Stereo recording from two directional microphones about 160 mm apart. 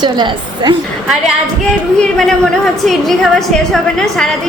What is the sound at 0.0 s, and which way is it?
Speech, 25° right (ahead or behind).